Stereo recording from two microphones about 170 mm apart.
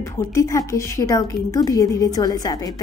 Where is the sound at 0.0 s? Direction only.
20° left (ahead or behind).